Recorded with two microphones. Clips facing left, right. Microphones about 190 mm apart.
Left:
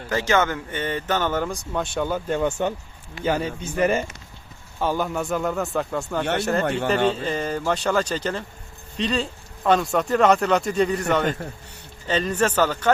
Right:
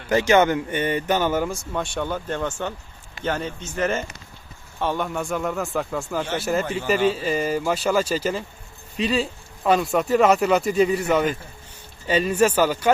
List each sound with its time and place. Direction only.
0.1 s a man's voice: 15° right (ahead or behind)
6.7 s speech: 65° left (ahead or behind)
7.1 s speech: 5° right (ahead or behind)